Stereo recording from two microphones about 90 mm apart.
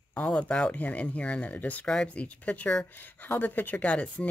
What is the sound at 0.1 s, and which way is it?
Speech, 15° left (ahead or behind).